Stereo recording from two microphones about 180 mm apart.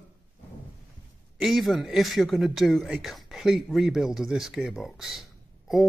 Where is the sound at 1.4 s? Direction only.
Centre (ahead or behind).